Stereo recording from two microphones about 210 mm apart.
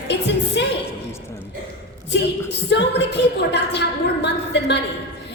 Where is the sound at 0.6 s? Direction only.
55° left (ahead or behind).